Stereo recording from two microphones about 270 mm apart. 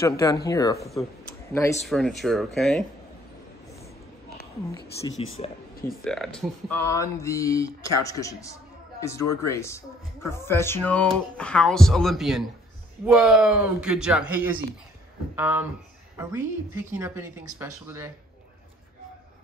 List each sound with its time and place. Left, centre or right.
0.0 s speech: centre
1.9 s speech: centre
5.0 s speech: left
6.0 s a woman's voice: centre